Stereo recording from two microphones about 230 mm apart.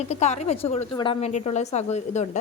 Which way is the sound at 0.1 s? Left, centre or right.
Left.